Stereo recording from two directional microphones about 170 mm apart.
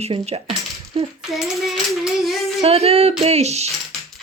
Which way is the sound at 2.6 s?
35° right (ahead or behind).